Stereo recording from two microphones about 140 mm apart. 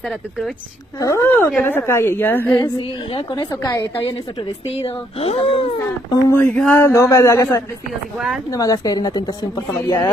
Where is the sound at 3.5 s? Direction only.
25° left (ahead or behind).